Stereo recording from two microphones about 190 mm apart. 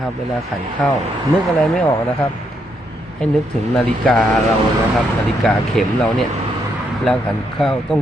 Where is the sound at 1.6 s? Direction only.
5° left (ahead or behind).